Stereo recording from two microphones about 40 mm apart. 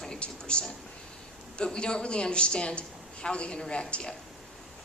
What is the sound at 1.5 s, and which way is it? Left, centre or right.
A man's voice, left.